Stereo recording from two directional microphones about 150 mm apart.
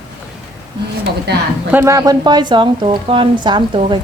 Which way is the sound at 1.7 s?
20° right (ahead or behind).